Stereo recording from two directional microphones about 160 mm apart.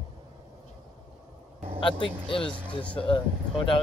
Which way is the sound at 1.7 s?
35° left (ahead or behind).